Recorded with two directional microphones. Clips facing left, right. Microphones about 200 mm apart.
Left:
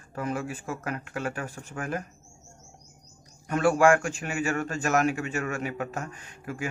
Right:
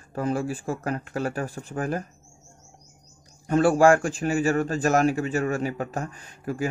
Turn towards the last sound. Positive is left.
turn(degrees=-35)  # may be behind; listen again after turning